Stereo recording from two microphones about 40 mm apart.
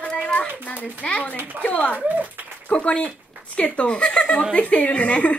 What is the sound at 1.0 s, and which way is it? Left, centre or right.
A woman's voice, left.